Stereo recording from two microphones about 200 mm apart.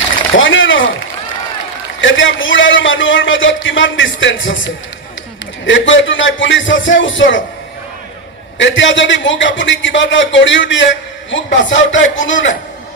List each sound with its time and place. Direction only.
0.3 s a sound: 70° left (ahead or behind)
2.0 s a man's voice: 70° left (ahead or behind)
5.7 s a man's voice: 70° left (ahead or behind)
8.5 s a man's voice: 65° left (ahead or behind)